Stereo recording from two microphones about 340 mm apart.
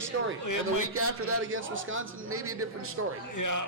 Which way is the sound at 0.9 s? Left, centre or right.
Right.